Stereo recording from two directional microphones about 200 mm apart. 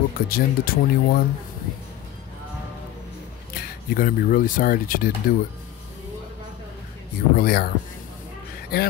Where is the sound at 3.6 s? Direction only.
45° left (ahead or behind).